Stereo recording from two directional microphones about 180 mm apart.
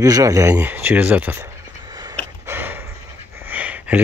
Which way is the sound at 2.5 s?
10° right (ahead or behind).